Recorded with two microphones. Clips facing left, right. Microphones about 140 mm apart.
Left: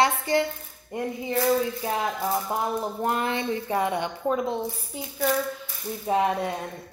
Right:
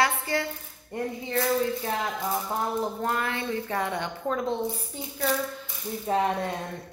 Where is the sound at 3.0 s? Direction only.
20° left (ahead or behind).